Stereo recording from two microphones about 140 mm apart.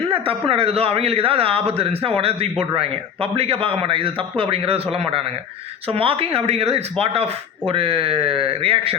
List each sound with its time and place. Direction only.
0.1 s a man's voice: 40° right (ahead or behind)